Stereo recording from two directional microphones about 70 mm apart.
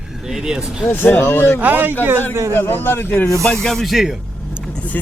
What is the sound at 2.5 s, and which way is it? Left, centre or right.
Speech, left.